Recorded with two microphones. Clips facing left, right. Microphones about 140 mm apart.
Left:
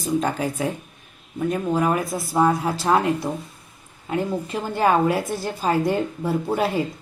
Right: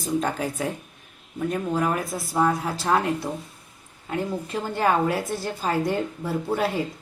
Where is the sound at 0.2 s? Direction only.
5° left (ahead or behind).